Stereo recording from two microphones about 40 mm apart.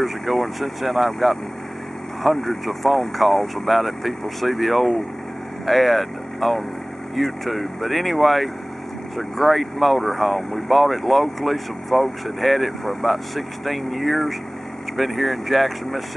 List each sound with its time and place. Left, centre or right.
0.0 s speech: centre